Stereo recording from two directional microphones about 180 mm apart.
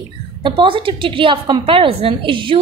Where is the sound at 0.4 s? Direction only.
25° right (ahead or behind).